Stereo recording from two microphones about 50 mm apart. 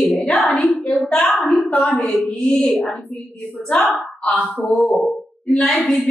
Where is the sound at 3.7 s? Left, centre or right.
Centre.